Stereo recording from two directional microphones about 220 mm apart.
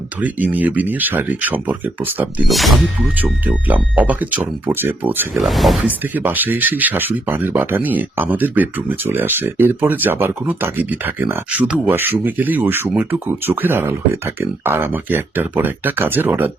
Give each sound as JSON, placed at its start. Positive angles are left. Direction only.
{"t": 0.2, "sound": "speech", "side_deg": -5}